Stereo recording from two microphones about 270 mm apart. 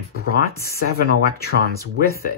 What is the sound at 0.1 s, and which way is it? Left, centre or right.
Speech, left.